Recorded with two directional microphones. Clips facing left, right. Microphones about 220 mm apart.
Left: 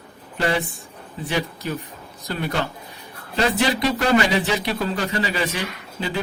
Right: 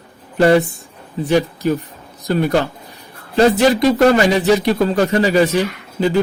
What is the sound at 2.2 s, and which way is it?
Speech, 45° right (ahead or behind).